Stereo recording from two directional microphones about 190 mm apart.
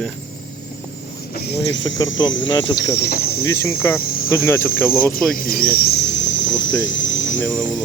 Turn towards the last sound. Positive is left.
turn(degrees=80)